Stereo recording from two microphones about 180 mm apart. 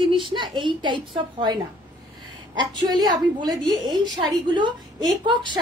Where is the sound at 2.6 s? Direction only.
25° right (ahead or behind).